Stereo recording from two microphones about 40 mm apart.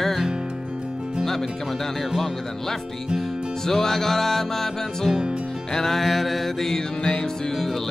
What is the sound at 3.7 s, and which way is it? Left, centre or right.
Music, centre.